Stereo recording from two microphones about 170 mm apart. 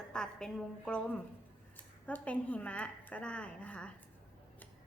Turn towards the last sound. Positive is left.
turn(degrees=5)  # may be behind; listen again after turning